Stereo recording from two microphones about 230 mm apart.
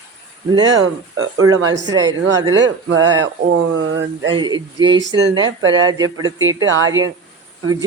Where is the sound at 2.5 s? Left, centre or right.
Right.